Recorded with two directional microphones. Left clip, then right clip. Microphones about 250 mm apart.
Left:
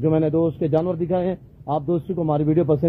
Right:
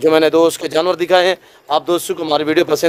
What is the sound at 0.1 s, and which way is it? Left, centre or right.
Speech, centre.